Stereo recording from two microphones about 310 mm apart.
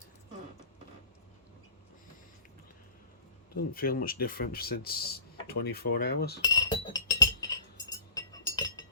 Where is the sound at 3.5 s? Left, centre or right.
Left.